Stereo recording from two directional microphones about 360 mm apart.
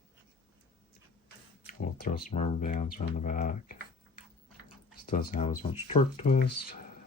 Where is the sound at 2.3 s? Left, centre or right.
Centre.